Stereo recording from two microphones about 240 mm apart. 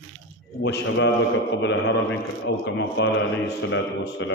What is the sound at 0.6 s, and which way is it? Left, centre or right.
A man's voice, left.